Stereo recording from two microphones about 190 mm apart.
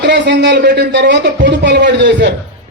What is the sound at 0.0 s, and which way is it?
A man's voice, 65° right (ahead or behind).